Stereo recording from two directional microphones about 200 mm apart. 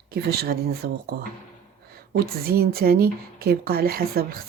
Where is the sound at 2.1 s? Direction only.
50° right (ahead or behind).